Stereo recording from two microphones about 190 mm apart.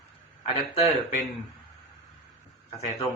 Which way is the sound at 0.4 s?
35° left (ahead or behind).